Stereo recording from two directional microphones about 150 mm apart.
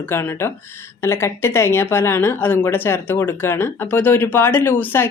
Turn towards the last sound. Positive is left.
turn(degrees=15)  # may be behind; listen again after turning